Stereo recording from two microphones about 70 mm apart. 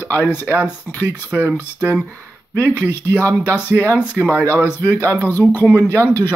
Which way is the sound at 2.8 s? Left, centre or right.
Left.